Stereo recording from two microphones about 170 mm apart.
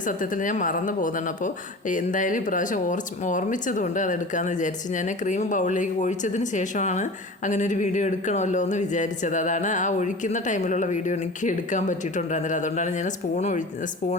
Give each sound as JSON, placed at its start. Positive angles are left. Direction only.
{"t": 0.0, "sound": "speech", "side_deg": 50}